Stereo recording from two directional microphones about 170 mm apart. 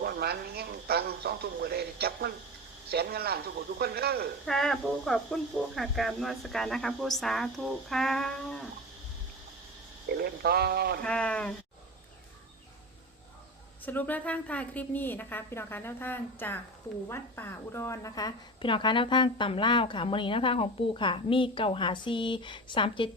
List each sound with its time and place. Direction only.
0.0 s a man's voice: 65° right (ahead or behind)
4.4 s speech: centre (ahead or behind)
10.1 s speech: 65° right (ahead or behind)
11.0 s a woman's voice: 5° left (ahead or behind)
13.8 s a woman's voice: 10° left (ahead or behind); by 23.0 s 30° left (ahead or behind)